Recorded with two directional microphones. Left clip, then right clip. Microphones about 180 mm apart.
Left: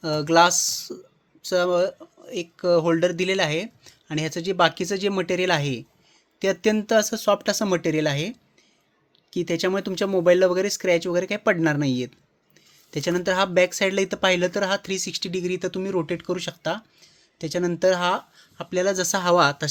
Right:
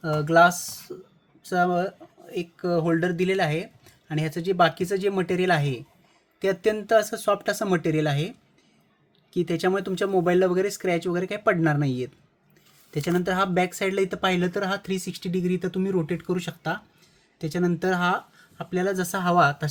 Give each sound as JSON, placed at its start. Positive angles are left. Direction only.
{"t": 0.0, "sound": "speech", "side_deg": 45}
{"t": 9.3, "sound": "speech", "side_deg": 30}